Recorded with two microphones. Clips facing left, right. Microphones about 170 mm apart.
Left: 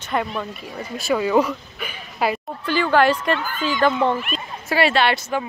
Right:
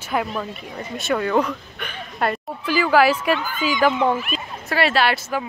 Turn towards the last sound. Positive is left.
turn(degrees=0)  # may be behind; listen again after turning